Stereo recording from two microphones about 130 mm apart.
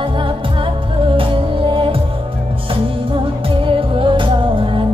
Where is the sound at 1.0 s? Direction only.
40° right (ahead or behind).